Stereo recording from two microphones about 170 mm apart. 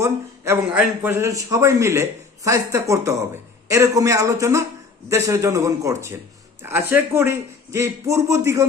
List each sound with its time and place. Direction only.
0.0 s a man's voice: 15° right (ahead or behind)